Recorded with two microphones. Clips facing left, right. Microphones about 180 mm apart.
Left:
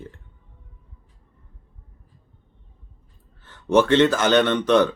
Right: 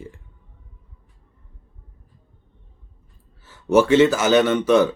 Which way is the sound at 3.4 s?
10° right (ahead or behind).